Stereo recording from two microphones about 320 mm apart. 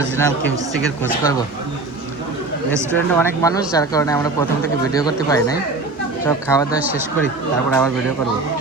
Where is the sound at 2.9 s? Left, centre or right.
Centre.